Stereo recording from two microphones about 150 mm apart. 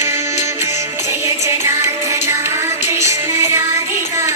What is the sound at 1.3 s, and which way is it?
Music, 20° right (ahead or behind).